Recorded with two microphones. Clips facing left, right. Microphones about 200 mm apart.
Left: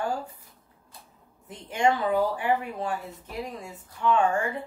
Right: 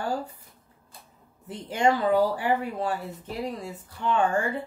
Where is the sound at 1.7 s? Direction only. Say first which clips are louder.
Right 2 dB; 35° right (ahead or behind).